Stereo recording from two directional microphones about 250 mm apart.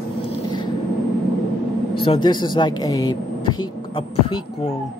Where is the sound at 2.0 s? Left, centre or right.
Centre.